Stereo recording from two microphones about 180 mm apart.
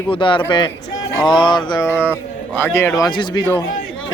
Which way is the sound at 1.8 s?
10° left (ahead or behind).